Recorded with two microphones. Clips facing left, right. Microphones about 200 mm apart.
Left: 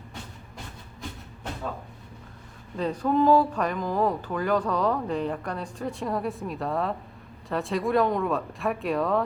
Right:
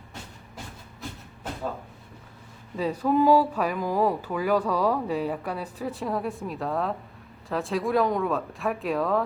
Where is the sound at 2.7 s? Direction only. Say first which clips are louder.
Right 1 dB; 5° right (ahead or behind).